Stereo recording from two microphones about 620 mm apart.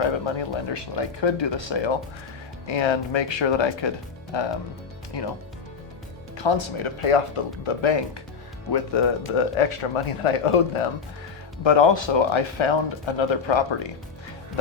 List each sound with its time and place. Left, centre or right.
0.0 s speech: left
6.3 s speech: left
11.6 s speech: left